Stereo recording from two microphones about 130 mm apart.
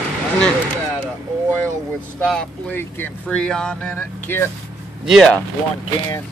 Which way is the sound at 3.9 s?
15° left (ahead or behind).